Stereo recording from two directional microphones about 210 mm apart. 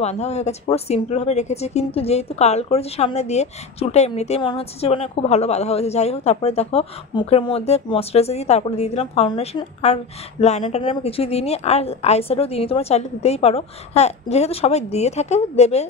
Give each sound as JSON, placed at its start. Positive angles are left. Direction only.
{"t": 0.0, "sound": "a woman's voice", "side_deg": 30}